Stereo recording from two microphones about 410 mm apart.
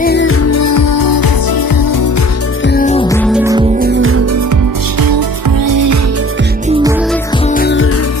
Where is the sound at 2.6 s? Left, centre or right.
Left; by 3.6 s centre.